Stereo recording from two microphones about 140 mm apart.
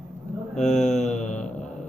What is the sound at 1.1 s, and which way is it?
Mantra, 5° left (ahead or behind).